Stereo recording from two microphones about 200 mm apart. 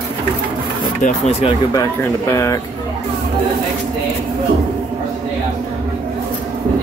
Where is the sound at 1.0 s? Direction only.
35° left (ahead or behind).